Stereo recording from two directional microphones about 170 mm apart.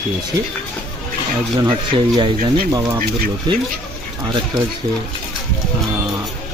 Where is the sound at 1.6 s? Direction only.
25° right (ahead or behind).